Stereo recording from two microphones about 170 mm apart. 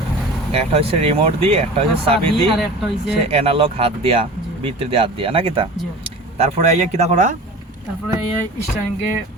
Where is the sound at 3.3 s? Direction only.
35° right (ahead or behind).